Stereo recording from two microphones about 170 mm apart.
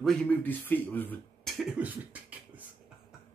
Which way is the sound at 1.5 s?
Centre (ahead or behind).